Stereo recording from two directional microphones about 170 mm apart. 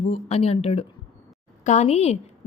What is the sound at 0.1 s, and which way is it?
A woman's voice, 35° left (ahead or behind).